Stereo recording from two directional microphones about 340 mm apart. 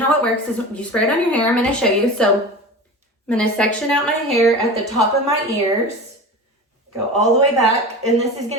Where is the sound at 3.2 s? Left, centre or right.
Centre.